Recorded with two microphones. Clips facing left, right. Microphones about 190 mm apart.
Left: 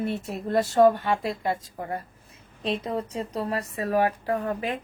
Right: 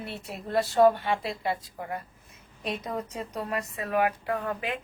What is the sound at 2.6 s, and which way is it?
A woman's voice, 30° left (ahead or behind).